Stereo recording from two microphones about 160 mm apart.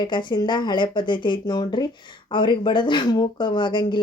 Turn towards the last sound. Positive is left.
turn(degrees=30)  # may be behind; listen again after turning